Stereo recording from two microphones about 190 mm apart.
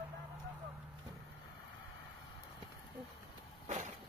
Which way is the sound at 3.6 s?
40° right (ahead or behind).